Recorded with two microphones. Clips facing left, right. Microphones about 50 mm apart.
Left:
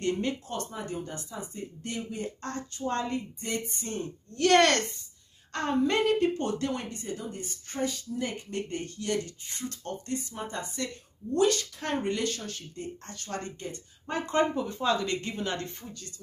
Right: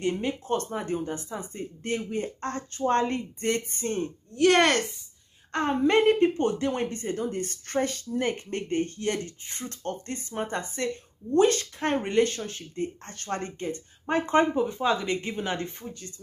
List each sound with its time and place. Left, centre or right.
0.0 s speech: centre
0.7 s a woman's voice: right
4.4 s a woman's voice: centre